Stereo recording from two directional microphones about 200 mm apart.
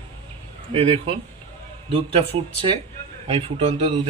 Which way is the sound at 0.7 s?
30° right (ahead or behind).